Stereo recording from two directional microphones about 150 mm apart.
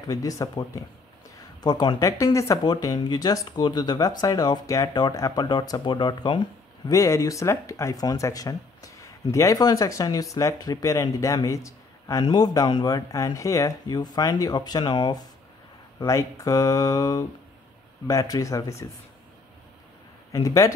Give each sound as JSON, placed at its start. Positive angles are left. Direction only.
{"t": 0.0, "sound": "speech", "side_deg": 25}
{"t": 20.3, "sound": "speech", "side_deg": 20}